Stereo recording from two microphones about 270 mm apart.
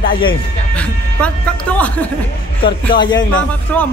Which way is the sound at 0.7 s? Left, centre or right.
Centre.